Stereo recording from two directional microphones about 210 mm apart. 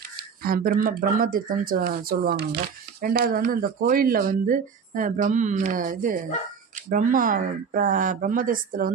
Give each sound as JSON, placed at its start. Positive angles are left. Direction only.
{"t": 0.4, "sound": "speech", "side_deg": -45}